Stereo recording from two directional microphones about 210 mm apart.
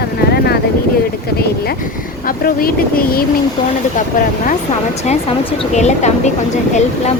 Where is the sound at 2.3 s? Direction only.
45° left (ahead or behind).